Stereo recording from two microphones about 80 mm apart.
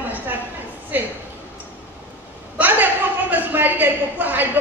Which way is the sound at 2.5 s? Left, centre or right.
Right.